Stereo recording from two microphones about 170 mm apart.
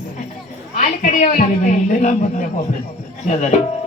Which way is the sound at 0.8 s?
40° left (ahead or behind).